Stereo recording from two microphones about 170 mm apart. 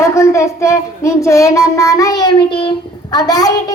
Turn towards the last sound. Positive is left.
turn(degrees=20)  # may be behind; listen again after turning